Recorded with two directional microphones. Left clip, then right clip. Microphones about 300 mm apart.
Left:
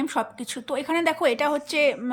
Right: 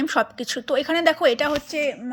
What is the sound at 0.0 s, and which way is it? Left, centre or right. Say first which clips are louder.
Speech: right 5 dB; centre.